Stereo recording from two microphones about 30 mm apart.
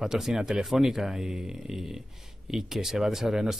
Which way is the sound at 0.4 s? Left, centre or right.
Right.